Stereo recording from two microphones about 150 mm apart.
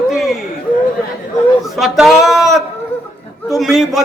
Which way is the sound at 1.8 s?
Centre (ahead or behind).